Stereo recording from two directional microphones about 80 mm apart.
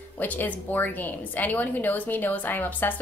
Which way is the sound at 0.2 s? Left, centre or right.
Left.